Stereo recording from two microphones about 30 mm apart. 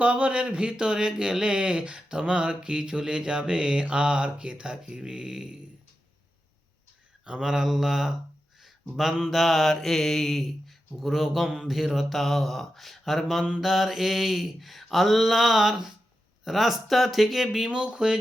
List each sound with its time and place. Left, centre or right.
0.2 s speech: right
0.4 s speech: right
7.3 s speech: right
7.5 s mantra: centre
8.6 s a sound: centre
9.3 s mantra: centre
11.0 s mantra: centre
17.7 s speech: right